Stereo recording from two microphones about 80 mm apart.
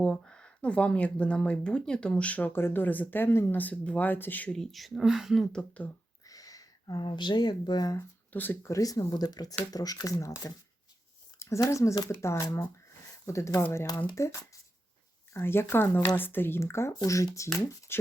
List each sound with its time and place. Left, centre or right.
0.0 s speech: centre
2.5 s speech: left
4.5 s speech: centre
5.5 s speech: centre
6.2 s speech: left
8.3 s speech: left
8.6 s speech: left
11.3 s a sound: left
11.6 s speech: left